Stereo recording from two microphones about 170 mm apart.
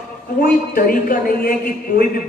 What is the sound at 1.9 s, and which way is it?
Speech, 80° left.